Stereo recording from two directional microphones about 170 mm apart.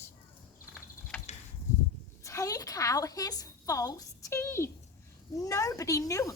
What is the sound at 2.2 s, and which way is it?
A woman's voice, 20° left (ahead or behind).